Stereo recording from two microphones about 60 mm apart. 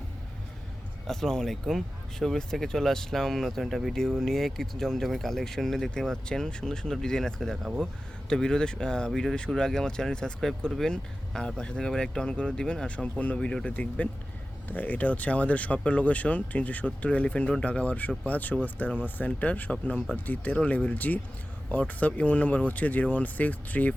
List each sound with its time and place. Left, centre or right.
1.0 s speech: centre; by 23.9 s left